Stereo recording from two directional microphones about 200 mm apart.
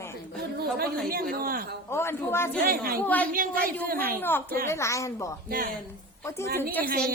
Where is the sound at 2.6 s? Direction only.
45° right (ahead or behind).